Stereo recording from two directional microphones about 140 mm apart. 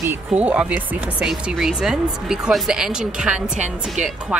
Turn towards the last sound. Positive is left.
turn(degrees=-5)  # may be behind; listen again after turning